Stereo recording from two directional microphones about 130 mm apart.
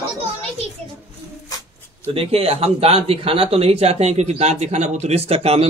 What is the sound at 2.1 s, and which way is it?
Speech, 50° right (ahead or behind).